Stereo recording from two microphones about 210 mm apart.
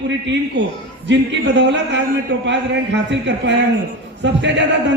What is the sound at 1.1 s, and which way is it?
A man's voice, 55° right (ahead or behind).